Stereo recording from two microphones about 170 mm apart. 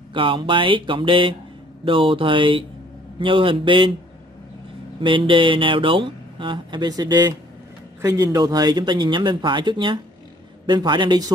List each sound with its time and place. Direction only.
0.1 s speech: 30° right (ahead or behind)
5.0 s speech: 30° right (ahead or behind)